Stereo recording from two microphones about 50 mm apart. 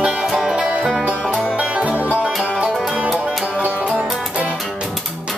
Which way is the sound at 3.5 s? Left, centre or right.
Right.